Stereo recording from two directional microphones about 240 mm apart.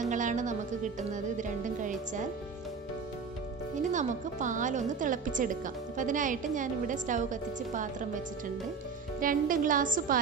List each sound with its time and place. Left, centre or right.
0.0 s music: right
1.1 s a woman's voice: right
3.9 s a woman's voice: right
9.2 s a woman's voice: right